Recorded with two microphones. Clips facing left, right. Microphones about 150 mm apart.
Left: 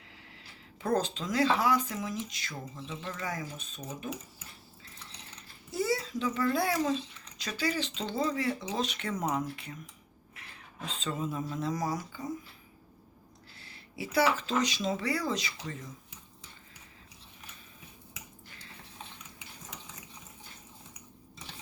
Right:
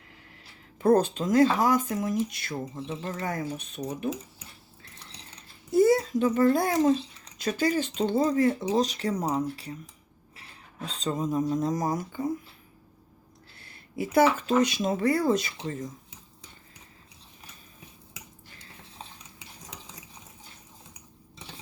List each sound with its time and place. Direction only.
0.8 s speech: 55° right (ahead or behind)
2.9 s speech: 35° right (ahead or behind)
3.2 s speech: 60° right (ahead or behind)
5.7 s a child's voice: 50° right (ahead or behind); by 9.7 s 35° right (ahead or behind)
10.8 s speech: 40° right (ahead or behind)
13.6 s speech: 50° right (ahead or behind)